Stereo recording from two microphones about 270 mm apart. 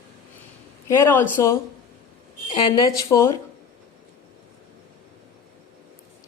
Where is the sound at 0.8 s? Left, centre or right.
Centre.